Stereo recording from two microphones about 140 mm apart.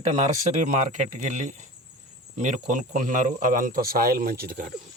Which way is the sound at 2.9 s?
65° right (ahead or behind).